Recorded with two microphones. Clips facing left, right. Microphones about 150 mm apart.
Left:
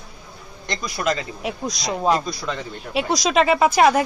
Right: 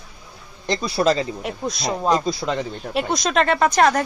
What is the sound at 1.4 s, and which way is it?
Speech, centre (ahead or behind).